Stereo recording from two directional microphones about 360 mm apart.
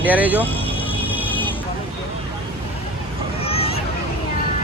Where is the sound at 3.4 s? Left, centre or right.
Centre.